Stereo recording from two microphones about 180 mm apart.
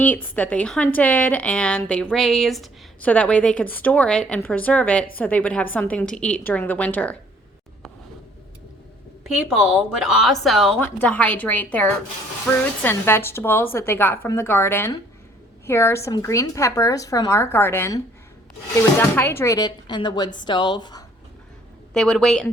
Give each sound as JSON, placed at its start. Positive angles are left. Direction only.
{"t": 0.0, "sound": "a woman's voice", "side_deg": 10}
{"t": 10.0, "sound": "a woman's voice", "side_deg": 0}
{"t": 21.9, "sound": "a woman's voice", "side_deg": 5}